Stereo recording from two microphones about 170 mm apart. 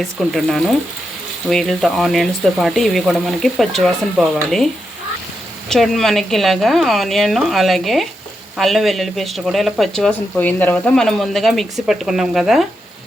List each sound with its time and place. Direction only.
0.0 s speech: centre (ahead or behind)